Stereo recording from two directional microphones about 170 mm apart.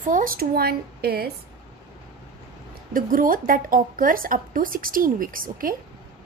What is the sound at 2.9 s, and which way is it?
A woman's voice, 55° right (ahead or behind).